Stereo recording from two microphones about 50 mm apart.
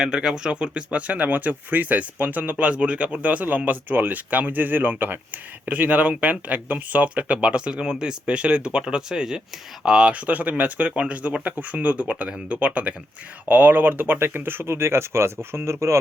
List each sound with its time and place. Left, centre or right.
0.0 s speech: centre; by 16.0 s right